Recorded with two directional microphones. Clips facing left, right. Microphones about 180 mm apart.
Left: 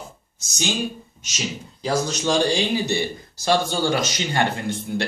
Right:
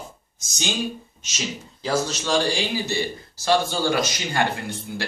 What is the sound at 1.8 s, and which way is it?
A man's voice, 15° left (ahead or behind).